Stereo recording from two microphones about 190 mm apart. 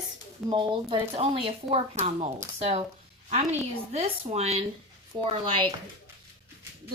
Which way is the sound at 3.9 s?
35° right (ahead or behind).